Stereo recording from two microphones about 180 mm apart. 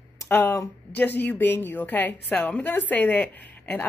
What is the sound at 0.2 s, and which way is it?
A man's voice, 10° left (ahead or behind).